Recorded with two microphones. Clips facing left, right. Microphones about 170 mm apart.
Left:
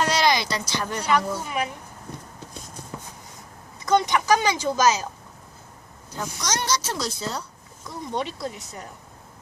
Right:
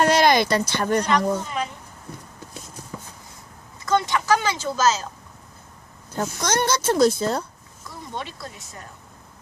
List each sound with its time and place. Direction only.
0.0 s speech: 55° right (ahead or behind)
1.0 s speech: 10° left (ahead or behind)
3.8 s speech: 15° left (ahead or behind)
6.1 s speech: 55° right (ahead or behind)
7.9 s speech: 20° left (ahead or behind)